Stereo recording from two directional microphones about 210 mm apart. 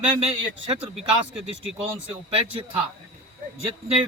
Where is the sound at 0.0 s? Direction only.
25° right (ahead or behind).